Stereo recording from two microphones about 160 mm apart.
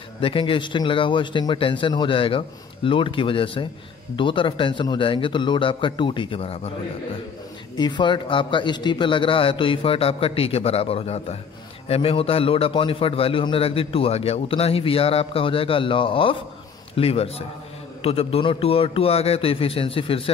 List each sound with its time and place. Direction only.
0.2 s a man's voice: 35° left (ahead or behind)
7.7 s a man's voice: 30° left (ahead or behind)